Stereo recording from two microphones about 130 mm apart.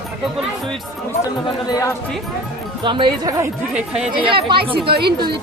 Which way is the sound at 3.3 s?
25° right (ahead or behind).